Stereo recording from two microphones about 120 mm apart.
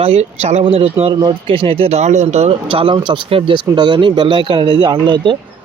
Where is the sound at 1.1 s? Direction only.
35° right (ahead or behind); by 2.5 s 65° right (ahead or behind).